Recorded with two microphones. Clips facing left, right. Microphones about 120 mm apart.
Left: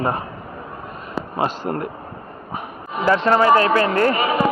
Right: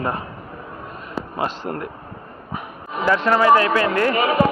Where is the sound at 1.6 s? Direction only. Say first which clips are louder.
Left 3 dB; 10° left (ahead or behind).